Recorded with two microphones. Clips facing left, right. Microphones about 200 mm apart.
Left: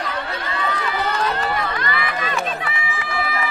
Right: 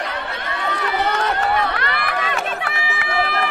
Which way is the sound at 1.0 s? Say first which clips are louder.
Right 2 dB; 65° right (ahead or behind).